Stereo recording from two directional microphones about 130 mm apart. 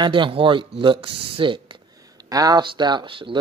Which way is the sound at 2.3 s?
30° right (ahead or behind).